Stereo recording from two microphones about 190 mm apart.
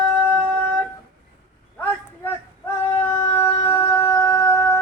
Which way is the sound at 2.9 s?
15° left (ahead or behind).